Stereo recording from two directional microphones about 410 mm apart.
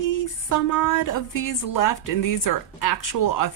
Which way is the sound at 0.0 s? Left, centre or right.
Left.